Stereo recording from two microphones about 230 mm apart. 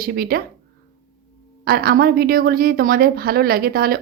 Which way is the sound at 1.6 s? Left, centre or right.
Right.